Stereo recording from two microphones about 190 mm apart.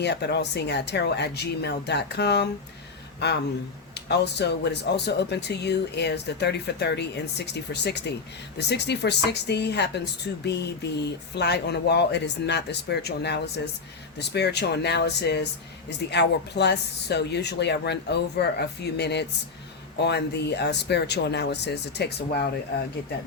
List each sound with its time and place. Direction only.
0.0 s speech: 60° left (ahead or behind)